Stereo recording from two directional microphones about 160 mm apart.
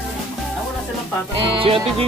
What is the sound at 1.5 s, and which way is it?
Music, 35° right (ahead or behind).